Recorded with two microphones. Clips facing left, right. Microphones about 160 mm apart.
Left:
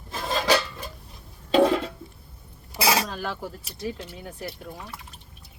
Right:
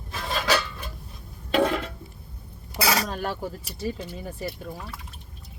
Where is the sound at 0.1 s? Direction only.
30° left (ahead or behind).